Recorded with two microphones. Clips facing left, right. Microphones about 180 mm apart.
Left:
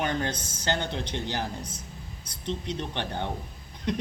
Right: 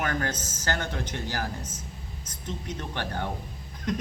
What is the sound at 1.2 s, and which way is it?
Speech, 20° left (ahead or behind).